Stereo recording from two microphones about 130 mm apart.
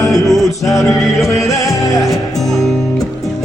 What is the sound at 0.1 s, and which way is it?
Music, centre (ahead or behind).